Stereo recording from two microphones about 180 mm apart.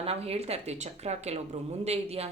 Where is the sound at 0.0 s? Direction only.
35° right (ahead or behind).